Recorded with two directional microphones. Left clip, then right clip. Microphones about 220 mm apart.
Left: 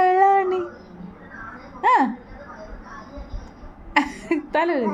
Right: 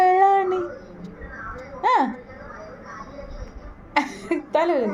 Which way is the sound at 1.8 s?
20° left (ahead or behind).